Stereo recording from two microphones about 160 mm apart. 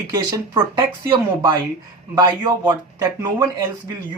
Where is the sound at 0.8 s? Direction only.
30° right (ahead or behind).